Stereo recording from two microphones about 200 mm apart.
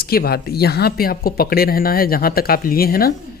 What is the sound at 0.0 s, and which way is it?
Speech, 50° left (ahead or behind).